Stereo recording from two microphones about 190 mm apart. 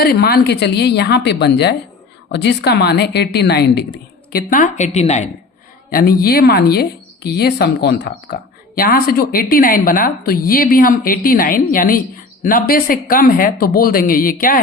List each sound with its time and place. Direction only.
0.0 s a woman's voice: 55° left (ahead or behind)
4.3 s speech: 45° left (ahead or behind)
5.9 s a woman's voice: 50° left (ahead or behind)